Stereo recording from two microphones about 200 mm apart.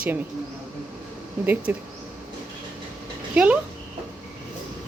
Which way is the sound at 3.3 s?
5° right (ahead or behind).